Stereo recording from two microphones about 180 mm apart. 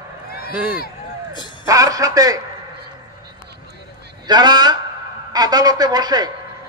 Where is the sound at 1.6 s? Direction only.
20° right (ahead or behind).